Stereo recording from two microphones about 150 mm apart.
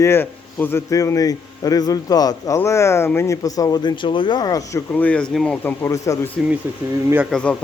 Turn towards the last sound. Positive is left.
turn(degrees=5)  # may be behind; listen again after turning